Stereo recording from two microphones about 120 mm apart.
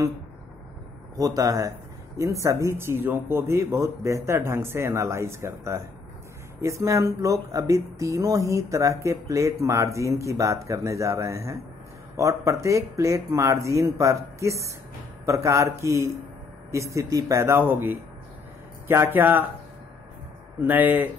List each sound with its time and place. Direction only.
1.1 s speech: 30° right (ahead or behind)
20.6 s speech: 15° right (ahead or behind)